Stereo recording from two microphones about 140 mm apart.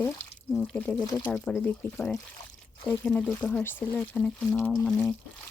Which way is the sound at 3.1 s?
5° left (ahead or behind).